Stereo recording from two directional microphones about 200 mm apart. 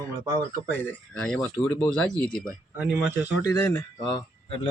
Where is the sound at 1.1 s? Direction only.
5° left (ahead or behind).